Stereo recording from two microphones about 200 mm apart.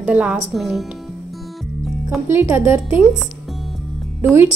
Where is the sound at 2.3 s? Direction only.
10° right (ahead or behind).